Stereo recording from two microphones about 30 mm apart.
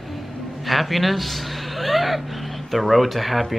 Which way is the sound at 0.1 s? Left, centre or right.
Centre.